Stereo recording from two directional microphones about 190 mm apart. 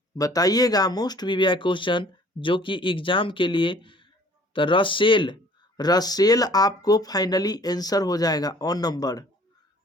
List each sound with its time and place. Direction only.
0.2 s speech: 20° left (ahead or behind)